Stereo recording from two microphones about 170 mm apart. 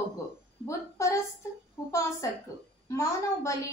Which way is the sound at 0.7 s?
15° left (ahead or behind).